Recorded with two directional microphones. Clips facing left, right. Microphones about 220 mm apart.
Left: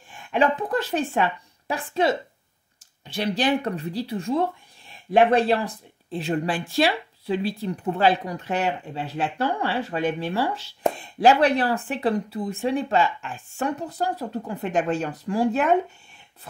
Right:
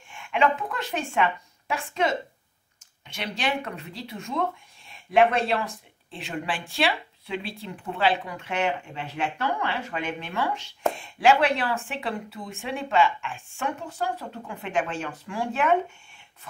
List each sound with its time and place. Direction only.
0.1 s a woman's voice: 35° left (ahead or behind)
3.2 s speech: 35° left (ahead or behind)